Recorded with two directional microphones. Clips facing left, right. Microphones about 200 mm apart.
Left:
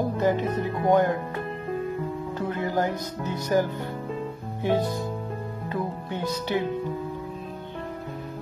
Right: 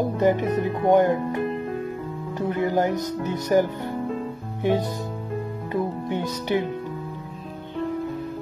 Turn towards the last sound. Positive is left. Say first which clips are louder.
# right 2 dB
turn(degrees=-15)  # may be behind; listen again after turning